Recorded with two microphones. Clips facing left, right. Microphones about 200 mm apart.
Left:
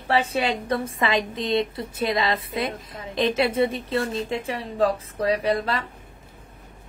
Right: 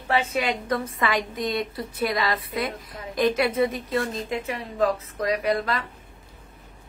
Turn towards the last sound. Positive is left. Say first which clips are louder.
# left 1 dB
turn(degrees=30)  # may be behind; listen again after turning